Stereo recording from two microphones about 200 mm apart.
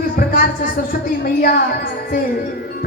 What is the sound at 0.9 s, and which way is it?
Speech, 45° left (ahead or behind).